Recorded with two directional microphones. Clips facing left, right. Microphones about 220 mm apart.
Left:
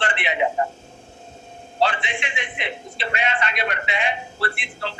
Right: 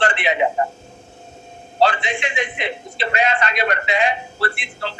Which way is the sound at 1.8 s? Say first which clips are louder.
Right 4 dB; 40° right (ahead or behind).